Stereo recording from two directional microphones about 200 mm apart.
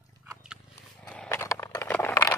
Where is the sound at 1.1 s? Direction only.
10° left (ahead or behind).